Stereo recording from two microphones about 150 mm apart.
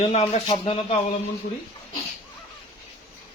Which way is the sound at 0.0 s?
45° left (ahead or behind).